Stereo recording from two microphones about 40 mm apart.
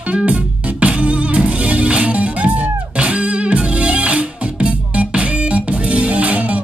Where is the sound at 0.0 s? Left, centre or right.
Right.